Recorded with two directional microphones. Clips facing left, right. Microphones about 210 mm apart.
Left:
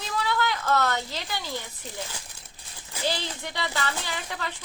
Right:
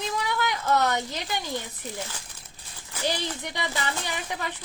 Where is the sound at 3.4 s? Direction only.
15° right (ahead or behind).